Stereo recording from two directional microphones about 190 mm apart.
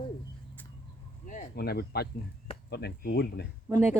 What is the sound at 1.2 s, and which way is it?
Insect, 45° left (ahead or behind).